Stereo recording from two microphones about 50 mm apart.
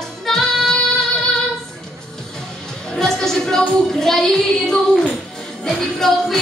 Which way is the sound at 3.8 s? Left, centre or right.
Centre.